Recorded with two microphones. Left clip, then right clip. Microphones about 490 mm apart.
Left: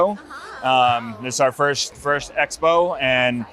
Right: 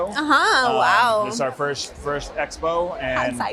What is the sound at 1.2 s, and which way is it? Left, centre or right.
A man's voice, left.